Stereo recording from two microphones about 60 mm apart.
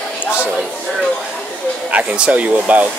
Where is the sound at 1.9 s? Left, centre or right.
Centre.